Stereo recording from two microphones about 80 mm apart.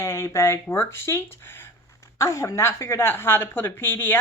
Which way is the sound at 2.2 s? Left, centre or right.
Left.